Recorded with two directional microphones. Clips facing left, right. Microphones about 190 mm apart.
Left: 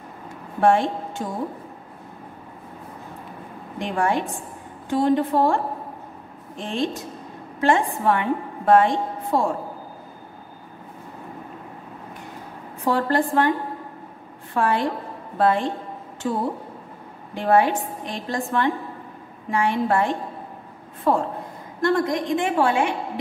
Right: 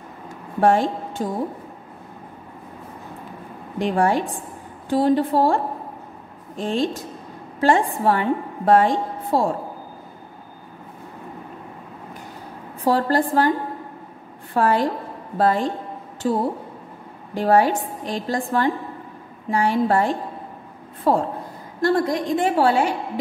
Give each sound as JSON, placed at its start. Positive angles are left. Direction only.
{"t": 0.6, "sound": "a woman's voice", "side_deg": -40}
{"t": 3.8, "sound": "a woman's voice", "side_deg": -35}
{"t": 12.8, "sound": "a woman's voice", "side_deg": -35}
{"t": 14.5, "sound": "a woman's voice", "side_deg": -40}